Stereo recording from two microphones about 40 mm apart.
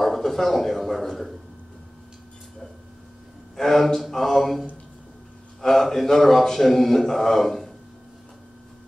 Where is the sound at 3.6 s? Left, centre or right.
Centre.